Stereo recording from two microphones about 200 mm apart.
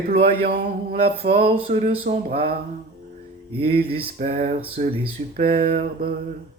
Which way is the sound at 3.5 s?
30° right (ahead or behind).